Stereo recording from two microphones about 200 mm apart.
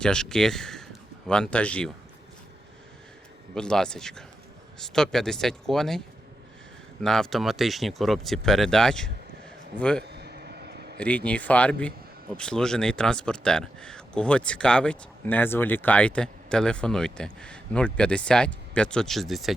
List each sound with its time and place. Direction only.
0.0 s speech: 5° left (ahead or behind)
3.5 s speech: 5° left (ahead or behind)
7.0 s speech: centre (ahead or behind)
10.0 s vehicle: 55° right (ahead or behind)
10.9 s speech: 5° left (ahead or behind)